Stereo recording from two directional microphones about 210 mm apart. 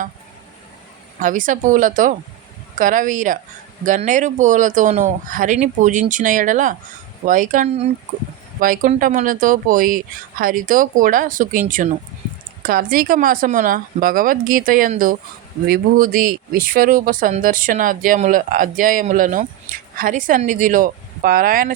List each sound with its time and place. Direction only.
1.2 s speech: 40° right (ahead or behind)
12.6 s speech: 40° right (ahead or behind)